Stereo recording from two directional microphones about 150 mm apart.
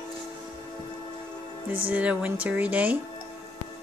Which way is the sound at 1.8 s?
10° right (ahead or behind).